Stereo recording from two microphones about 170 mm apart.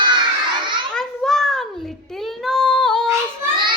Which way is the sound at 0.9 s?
Centre (ahead or behind).